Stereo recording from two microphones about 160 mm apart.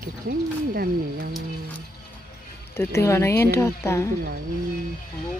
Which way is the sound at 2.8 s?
15° left (ahead or behind).